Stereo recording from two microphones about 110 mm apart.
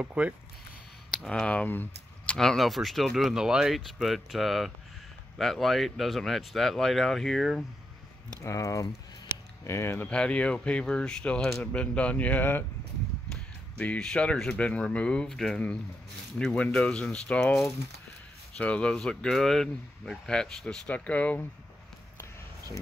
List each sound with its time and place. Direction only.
0.0 s speech: 10° right (ahead or behind)
1.1 s speech: 5° left (ahead or behind)
2.3 s speech: centre (ahead or behind)
8.5 s speech: 30° left (ahead or behind)
10.0 s speech: 10° left (ahead or behind)
18.6 s speech: 10° left (ahead or behind)